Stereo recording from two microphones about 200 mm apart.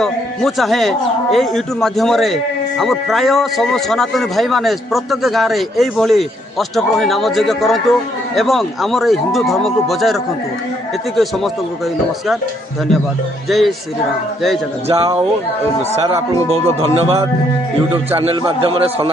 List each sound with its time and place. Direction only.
0.0 s a man's voice: centre (ahead or behind)
13.5 s a man's voice: centre (ahead or behind)
14.9 s a man's voice: 30° right (ahead or behind)
16.5 s a man's voice: 30° right (ahead or behind)